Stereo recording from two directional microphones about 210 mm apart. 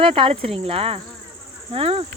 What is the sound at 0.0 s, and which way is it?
Speech, 25° right (ahead or behind).